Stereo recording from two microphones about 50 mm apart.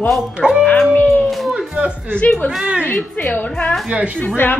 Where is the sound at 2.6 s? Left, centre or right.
Right.